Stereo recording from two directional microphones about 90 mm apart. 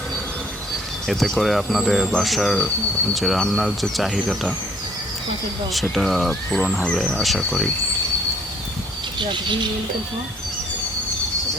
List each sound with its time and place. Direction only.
1.0 s speech: centre (ahead or behind)
5.7 s speech: centre (ahead or behind)
9.1 s speech: 60° right (ahead or behind)